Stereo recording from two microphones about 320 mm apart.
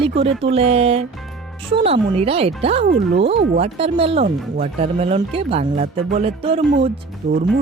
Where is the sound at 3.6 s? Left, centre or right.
Centre.